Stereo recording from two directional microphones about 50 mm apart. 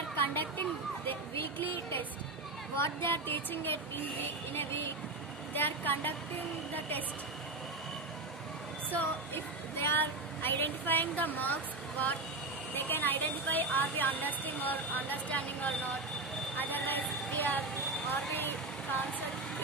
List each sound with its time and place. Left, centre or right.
0.1 s a sound: left
1.3 s speech: left
9.3 s speech: left
9.9 s speech: left
12.7 s speech: left
16.5 s a sound: left